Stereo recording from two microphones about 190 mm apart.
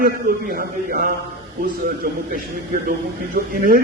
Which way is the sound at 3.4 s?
55° right (ahead or behind).